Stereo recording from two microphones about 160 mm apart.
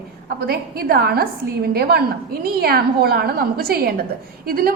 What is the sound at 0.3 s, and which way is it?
A woman's voice, 75° right (ahead or behind).